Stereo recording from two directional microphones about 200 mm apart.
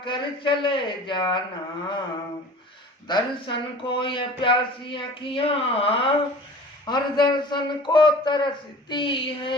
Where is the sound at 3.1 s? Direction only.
25° left (ahead or behind).